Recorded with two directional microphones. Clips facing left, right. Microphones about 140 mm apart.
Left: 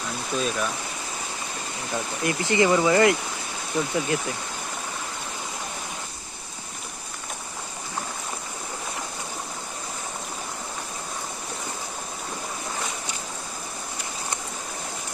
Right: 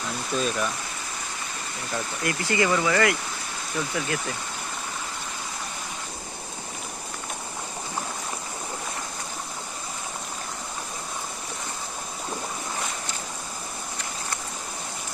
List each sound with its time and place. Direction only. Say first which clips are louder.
0.3 s speech: even; centre (ahead or behind)
2.2 s speech: left 3 dB; 20° left (ahead or behind)